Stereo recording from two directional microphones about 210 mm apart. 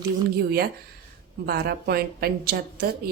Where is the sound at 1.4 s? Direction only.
45° right (ahead or behind).